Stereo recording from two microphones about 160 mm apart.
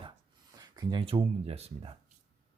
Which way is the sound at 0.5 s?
25° right (ahead or behind).